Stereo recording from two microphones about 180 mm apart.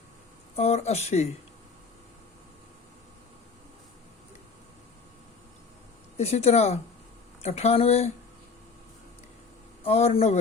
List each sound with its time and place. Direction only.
0.5 s speech: 35° left (ahead or behind)
6.1 s speech: 35° left (ahead or behind)
9.8 s a man's voice: 35° left (ahead or behind)